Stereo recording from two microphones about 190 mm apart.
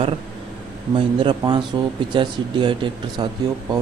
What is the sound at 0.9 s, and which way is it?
Speech, 25° right (ahead or behind).